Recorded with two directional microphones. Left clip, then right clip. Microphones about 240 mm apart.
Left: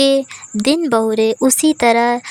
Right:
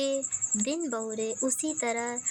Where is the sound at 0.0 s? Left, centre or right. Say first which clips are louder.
Left 16 dB; left.